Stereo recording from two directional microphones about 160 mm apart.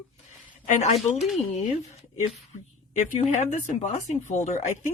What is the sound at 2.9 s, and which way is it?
Speech, 45° left (ahead or behind).